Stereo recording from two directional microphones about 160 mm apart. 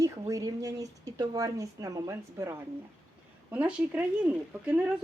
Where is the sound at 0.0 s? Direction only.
20° right (ahead or behind).